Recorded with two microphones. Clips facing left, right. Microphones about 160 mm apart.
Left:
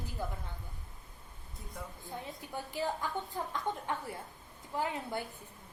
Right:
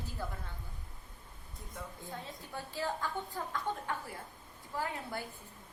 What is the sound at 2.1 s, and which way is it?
A woman's voice, 20° left (ahead or behind).